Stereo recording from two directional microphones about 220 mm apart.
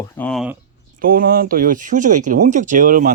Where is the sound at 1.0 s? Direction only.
40° right (ahead or behind).